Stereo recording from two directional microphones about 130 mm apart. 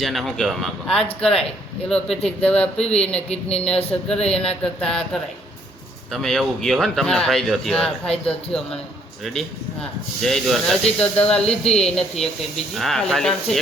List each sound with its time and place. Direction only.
0.0 s a man's voice: centre (ahead or behind)
3.2 s speech: 50° left (ahead or behind)
4.1 s speech: 5° left (ahead or behind)
10.2 s speech: centre (ahead or behind)